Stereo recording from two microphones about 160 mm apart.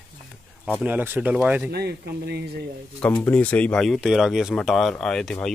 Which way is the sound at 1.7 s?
90° right.